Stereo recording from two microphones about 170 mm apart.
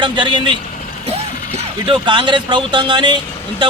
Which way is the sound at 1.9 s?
25° right (ahead or behind).